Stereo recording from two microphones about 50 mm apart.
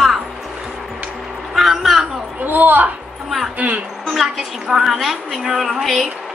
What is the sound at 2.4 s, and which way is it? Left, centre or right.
A woman's voice, right.